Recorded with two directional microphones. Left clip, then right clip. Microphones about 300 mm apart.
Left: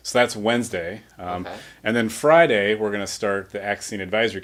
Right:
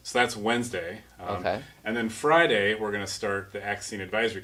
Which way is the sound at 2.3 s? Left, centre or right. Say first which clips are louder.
Left 6 dB; left.